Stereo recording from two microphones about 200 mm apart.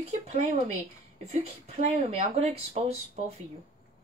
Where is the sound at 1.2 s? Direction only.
30° right (ahead or behind).